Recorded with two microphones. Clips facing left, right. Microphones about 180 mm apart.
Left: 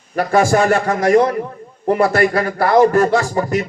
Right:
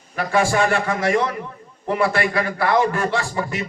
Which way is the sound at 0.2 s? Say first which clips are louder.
Left 5 dB; 40° left (ahead or behind).